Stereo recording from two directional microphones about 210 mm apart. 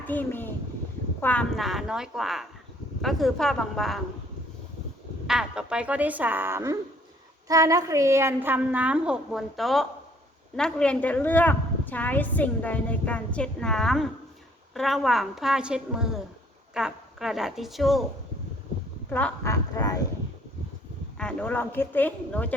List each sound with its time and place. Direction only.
0.1 s a woman's voice: 10° left (ahead or behind)
5.2 s a woman's voice: centre (ahead or behind)
19.1 s a woman's voice: 10° left (ahead or behind)
21.2 s a woman's voice: 5° left (ahead or behind)